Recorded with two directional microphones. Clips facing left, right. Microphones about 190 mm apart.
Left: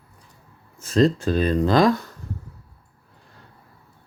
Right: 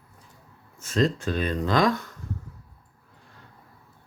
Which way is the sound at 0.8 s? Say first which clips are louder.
Left 6 dB; 35° left (ahead or behind).